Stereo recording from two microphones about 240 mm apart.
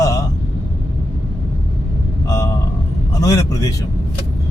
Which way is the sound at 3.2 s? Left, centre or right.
Centre.